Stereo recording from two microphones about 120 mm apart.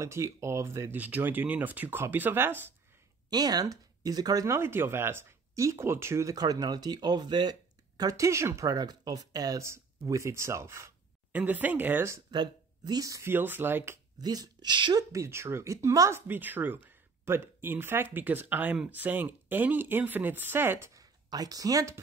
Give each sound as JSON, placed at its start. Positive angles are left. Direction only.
{"t": 0.0, "sound": "speech", "side_deg": -25}
{"t": 3.3, "sound": "a woman's voice", "side_deg": -35}
{"t": 12.3, "sound": "speech", "side_deg": -35}
{"t": 14.2, "sound": "a woman's voice", "side_deg": -35}
{"t": 15.1, "sound": "speech", "side_deg": -20}
{"t": 20.9, "sound": "speech", "side_deg": -30}